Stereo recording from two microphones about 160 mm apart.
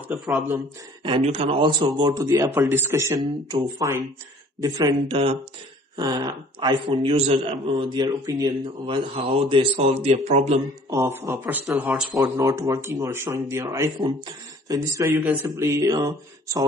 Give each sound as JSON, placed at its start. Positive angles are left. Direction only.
{"t": 1.0, "sound": "speech", "side_deg": -35}
{"t": 8.8, "sound": "a man's voice", "side_deg": -35}
{"t": 10.9, "sound": "speech", "side_deg": -15}